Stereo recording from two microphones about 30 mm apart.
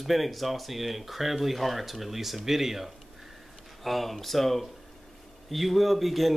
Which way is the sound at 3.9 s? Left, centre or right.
Centre.